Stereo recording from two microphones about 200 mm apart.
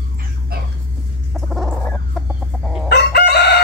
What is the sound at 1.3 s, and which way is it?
Dog, centre (ahead or behind).